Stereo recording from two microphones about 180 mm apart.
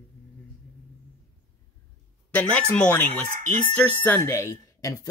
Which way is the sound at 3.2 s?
45° right (ahead or behind).